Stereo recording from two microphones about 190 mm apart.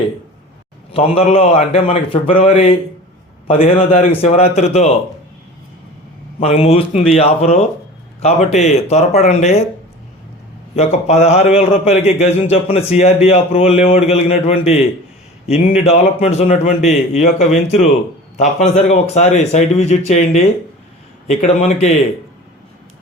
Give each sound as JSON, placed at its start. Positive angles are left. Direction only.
{"t": 0.9, "sound": "a man's voice", "side_deg": 30}
{"t": 6.4, "sound": "a man's voice", "side_deg": 35}
{"t": 10.8, "sound": "a man's voice", "side_deg": 35}